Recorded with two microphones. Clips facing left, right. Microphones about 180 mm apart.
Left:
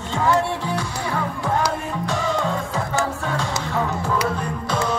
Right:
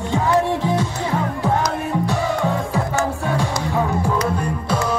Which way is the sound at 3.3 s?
15° right (ahead or behind).